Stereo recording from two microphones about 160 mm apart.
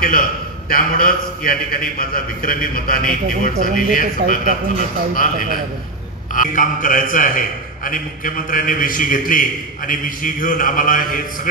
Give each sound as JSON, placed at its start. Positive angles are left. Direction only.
{"t": 0.0, "sound": "a man's voice", "side_deg": 65}